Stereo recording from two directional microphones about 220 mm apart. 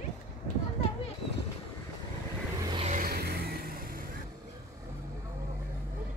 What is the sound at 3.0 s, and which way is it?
Music, 45° right (ahead or behind).